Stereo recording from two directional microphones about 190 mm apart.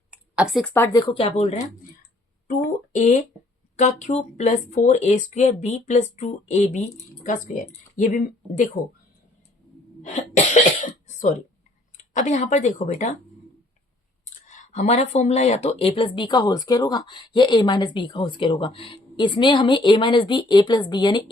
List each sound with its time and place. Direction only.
0.1 s a sound: 5° right (ahead or behind)
0.6 s speech: 10° left (ahead or behind)
0.9 s speech: 25° left (ahead or behind)
2.5 s a sound: 40° left (ahead or behind)
3.8 s speech: 35° left (ahead or behind)
7.9 s speech: 40° left (ahead or behind)
10.0 s cough: 35° left (ahead or behind)
11.2 s speech: 40° left (ahead or behind)
14.4 s speech: 40° left (ahead or behind); by 21.2 s 25° left (ahead or behind)